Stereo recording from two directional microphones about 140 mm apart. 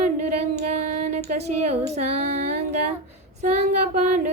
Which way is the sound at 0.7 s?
55° right (ahead or behind).